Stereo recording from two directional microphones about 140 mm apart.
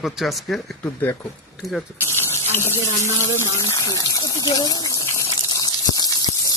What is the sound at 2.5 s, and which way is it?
Speech, 15° left (ahead or behind).